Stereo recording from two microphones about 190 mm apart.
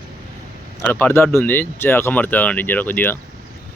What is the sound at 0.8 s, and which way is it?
Speech, 10° left (ahead or behind).